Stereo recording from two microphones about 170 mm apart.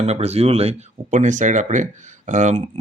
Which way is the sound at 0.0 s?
40° right (ahead or behind).